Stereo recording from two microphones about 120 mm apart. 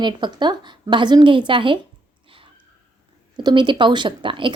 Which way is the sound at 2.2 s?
50° right (ahead or behind).